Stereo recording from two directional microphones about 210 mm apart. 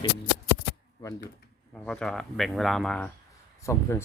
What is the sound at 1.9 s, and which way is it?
Speech, centre (ahead or behind).